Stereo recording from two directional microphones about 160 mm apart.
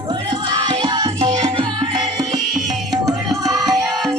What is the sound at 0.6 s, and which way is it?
Music, 30° right (ahead or behind).